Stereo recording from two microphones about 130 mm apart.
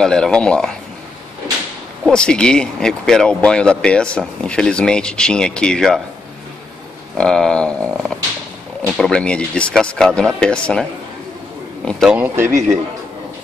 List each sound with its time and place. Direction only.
0.0 s speech: 5° left (ahead or behind)
2.0 s speech: 5° left (ahead or behind)
7.2 s a man's voice: 5° left (ahead or behind)
12.2 s a man's voice: 20° right (ahead or behind)